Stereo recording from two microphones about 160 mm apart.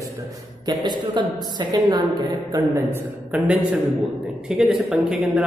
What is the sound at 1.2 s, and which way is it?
A woman's voice, 25° right (ahead or behind).